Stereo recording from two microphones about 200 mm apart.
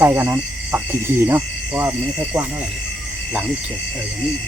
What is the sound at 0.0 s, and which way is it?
Cricket, 15° right (ahead or behind).